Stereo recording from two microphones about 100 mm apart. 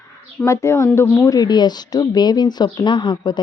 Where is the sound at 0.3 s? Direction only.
30° left (ahead or behind).